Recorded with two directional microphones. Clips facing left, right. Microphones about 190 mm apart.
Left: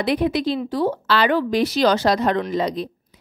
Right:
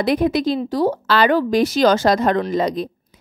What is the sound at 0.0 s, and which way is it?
A woman's voice, 45° right (ahead or behind).